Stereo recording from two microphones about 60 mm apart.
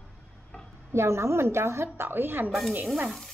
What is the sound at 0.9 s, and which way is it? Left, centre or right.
A woman's voice, right.